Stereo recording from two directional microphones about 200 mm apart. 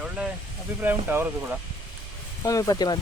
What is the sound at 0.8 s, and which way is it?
Speech, 10° right (ahead or behind).